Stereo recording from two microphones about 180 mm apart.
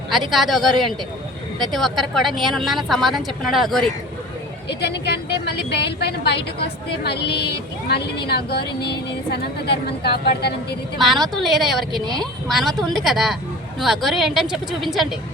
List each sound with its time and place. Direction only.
0.3 s a woman's voice: centre (ahead or behind)
4.7 s a woman's voice: 70° left (ahead or behind)
10.9 s a woman's voice: centre (ahead or behind)